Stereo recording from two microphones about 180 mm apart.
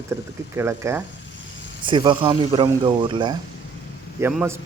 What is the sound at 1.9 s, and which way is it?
Speech, 25° right (ahead or behind).